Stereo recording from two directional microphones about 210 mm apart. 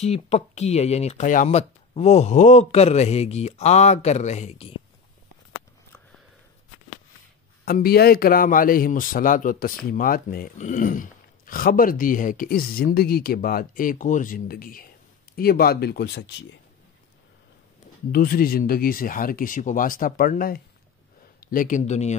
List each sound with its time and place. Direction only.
0.0 s speech: 30° left (ahead or behind)
7.6 s a man's voice: 45° left (ahead or behind)
18.1 s speech: 45° left (ahead or behind)